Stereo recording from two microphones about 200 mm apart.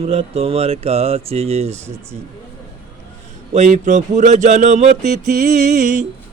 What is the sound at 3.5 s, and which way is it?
Speech, 35° right (ahead or behind).